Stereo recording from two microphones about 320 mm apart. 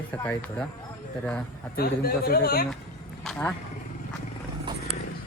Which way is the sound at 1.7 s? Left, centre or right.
Left.